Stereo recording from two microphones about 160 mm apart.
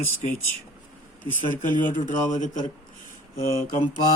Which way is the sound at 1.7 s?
55° left (ahead or behind).